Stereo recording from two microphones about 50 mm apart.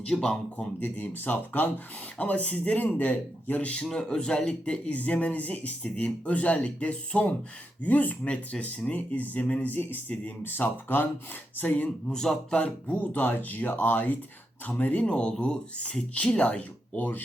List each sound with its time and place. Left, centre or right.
0.0 s speech: centre
0.5 s speech: left
3.8 s speech: centre; by 11.9 s left
12.0 s speech: centre
12.5 s speech: left